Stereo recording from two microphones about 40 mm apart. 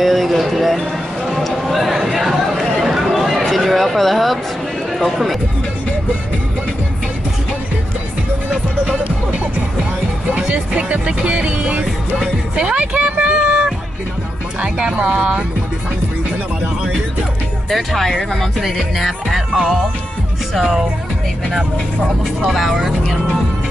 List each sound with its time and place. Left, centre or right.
0.0 s a sound: centre
4.9 s speech: centre
10.3 s music: right
12.5 s a sound: right
14.6 s speech: right
15.1 s music: right
17.6 s speech: centre
19.5 s music: centre
22.5 s speech: centre